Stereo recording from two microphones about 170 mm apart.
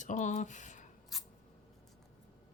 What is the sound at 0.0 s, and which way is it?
Speech, 45° left (ahead or behind).